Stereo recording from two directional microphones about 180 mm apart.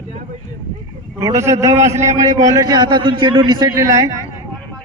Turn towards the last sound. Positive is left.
turn(degrees=-20)  # may be behind; listen again after turning